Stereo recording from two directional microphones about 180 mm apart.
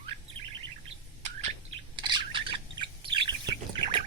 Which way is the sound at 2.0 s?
25° right (ahead or behind).